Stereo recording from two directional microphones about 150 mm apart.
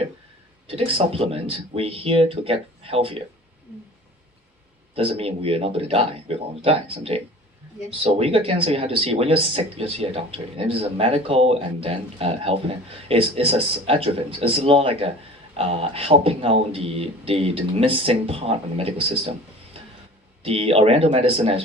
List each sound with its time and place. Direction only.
0.7 s speech: 35° right (ahead or behind)
4.9 s speech: 40° right (ahead or behind)
20.4 s speech: 40° right (ahead or behind)